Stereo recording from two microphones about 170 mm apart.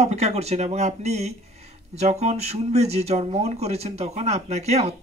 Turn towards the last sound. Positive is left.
turn(degrees=-40)  # may be behind; listen again after turning